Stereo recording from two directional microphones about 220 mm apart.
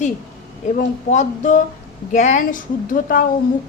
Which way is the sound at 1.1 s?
35° left (ahead or behind).